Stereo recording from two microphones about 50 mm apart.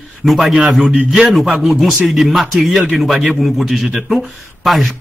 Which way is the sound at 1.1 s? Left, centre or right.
Centre.